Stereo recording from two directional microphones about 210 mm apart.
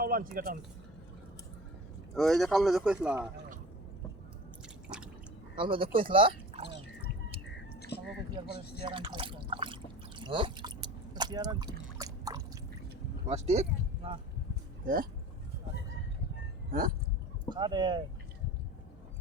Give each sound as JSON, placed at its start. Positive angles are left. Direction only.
{"t": 0.0, "sound": "speech", "side_deg": -45}
{"t": 2.1, "sound": "speech", "side_deg": 0}
{"t": 5.5, "sound": "speech", "side_deg": -25}
{"t": 7.8, "sound": "a sound", "side_deg": 50}
{"t": 8.5, "sound": "speech", "side_deg": 50}
{"t": 8.8, "sound": "a sound", "side_deg": -25}
{"t": 13.2, "sound": "speech", "side_deg": -30}
{"t": 14.8, "sound": "speech", "side_deg": -40}
{"t": 17.5, "sound": "speech", "side_deg": -20}